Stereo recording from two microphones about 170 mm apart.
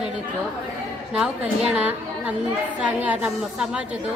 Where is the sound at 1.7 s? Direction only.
10° right (ahead or behind).